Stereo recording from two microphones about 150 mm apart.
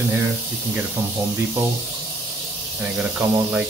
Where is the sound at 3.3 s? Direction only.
10° right (ahead or behind).